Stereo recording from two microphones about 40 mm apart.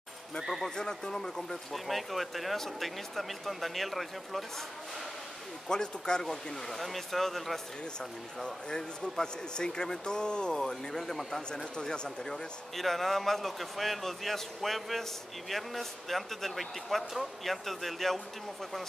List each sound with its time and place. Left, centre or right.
0.4 s a man's voice: centre
0.7 s speech: centre
1.7 s a man's voice: centre
5.7 s speech: centre
11.7 s speech: left
12.7 s a man's voice: centre